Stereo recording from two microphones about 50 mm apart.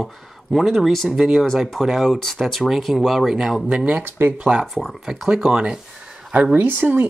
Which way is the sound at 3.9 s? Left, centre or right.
Right.